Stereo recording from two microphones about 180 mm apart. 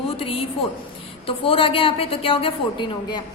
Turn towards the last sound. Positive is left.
turn(degrees=30)  # may be behind; listen again after turning